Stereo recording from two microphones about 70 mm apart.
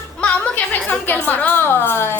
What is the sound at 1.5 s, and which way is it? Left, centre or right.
Speech, left.